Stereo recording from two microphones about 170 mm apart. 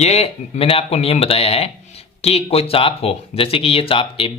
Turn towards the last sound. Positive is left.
turn(degrees=30)  # may be behind; listen again after turning